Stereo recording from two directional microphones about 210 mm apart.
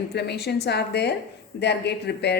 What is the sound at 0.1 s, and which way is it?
A woman's voice, 50° left (ahead or behind).